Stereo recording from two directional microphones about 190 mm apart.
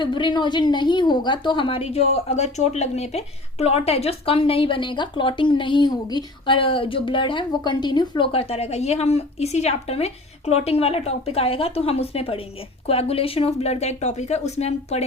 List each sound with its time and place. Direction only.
0.0 s speech: 25° left (ahead or behind)